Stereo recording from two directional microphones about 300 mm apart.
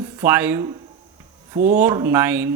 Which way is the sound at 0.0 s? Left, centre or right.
Centre.